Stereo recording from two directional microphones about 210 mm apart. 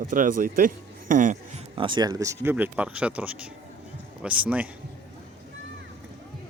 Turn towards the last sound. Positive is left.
turn(degrees=-10)  # may be behind; listen again after turning